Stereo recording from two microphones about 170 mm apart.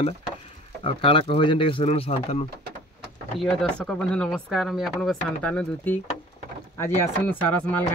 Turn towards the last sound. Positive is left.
turn(degrees=10)  # may be behind; listen again after turning